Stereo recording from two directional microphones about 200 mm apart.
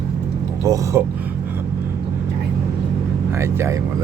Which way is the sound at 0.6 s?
15° right (ahead or behind).